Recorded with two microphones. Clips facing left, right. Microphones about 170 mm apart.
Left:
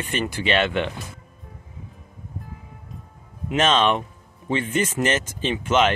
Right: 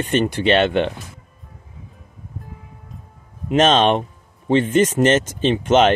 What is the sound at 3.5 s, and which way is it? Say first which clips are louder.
Speech: right 5 dB; 40° right (ahead or behind).